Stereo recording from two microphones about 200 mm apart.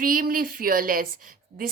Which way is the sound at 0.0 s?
45° right (ahead or behind).